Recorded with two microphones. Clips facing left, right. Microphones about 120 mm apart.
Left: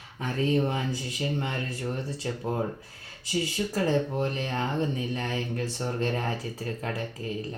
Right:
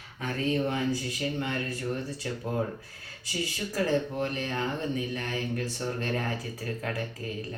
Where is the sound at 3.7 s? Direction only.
30° left (ahead or behind).